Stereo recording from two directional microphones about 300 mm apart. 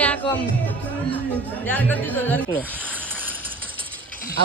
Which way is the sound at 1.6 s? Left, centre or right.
Centre.